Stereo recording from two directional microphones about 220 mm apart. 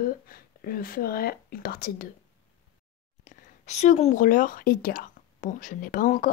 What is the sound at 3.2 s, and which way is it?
Speech, 30° left (ahead or behind).